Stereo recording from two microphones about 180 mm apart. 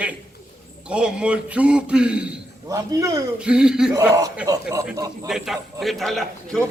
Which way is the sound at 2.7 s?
20° right (ahead or behind).